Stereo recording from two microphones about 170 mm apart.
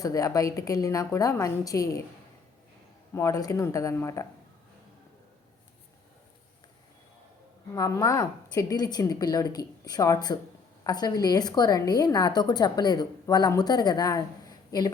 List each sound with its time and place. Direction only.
0.0 s a woman's voice: 20° left (ahead or behind)
3.2 s a woman's voice: 20° left (ahead or behind)
7.7 s a woman's voice: 20° left (ahead or behind)